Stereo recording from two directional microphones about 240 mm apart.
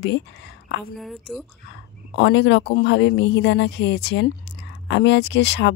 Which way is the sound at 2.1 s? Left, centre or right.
Left.